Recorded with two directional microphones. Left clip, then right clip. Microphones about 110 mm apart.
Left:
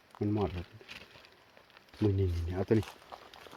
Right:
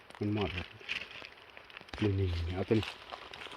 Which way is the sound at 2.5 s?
45° left (ahead or behind).